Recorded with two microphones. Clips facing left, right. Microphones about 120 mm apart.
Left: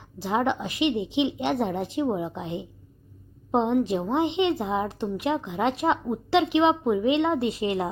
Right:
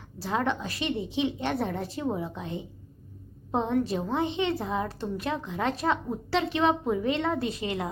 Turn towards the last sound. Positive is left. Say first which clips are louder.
# left 5 dB
turn(degrees=25)  # may be behind; listen again after turning